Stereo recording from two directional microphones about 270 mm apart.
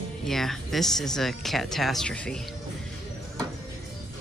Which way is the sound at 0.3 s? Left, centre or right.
Centre.